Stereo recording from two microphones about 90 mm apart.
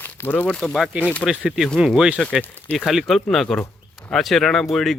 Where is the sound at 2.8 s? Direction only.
Centre (ahead or behind).